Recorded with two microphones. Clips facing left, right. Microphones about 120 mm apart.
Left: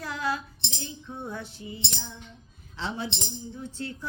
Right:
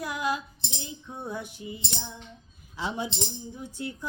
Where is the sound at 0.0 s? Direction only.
15° right (ahead or behind).